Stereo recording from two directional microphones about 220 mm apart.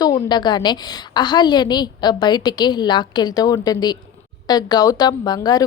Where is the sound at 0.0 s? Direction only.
20° left (ahead or behind).